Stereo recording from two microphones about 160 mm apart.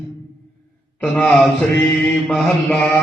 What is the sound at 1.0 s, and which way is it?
Mantra, centre (ahead or behind).